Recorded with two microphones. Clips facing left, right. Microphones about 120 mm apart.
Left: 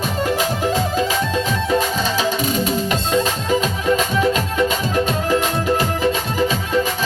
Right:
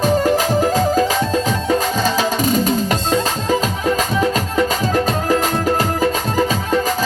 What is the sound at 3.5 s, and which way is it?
Music, 40° right (ahead or behind).